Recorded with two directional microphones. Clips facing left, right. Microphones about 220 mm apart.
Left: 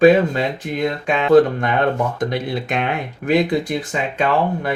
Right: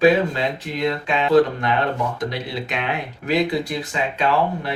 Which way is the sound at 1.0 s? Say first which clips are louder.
Left 4 dB; 50° left (ahead or behind).